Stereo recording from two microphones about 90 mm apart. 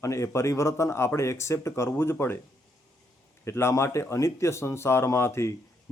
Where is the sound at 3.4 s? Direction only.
30° left (ahead or behind).